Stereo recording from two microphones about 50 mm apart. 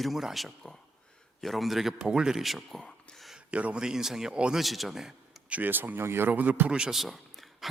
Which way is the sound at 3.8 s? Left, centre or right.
Centre.